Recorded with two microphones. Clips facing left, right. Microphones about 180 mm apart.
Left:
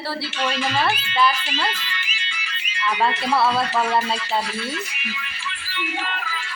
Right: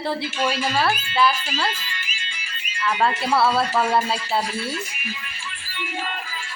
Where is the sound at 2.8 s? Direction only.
Centre (ahead or behind).